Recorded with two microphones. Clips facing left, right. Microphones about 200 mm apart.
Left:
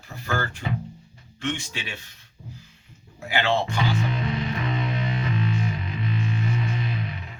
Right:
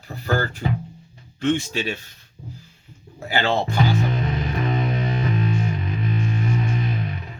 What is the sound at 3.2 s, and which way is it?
Speech, 35° right (ahead or behind).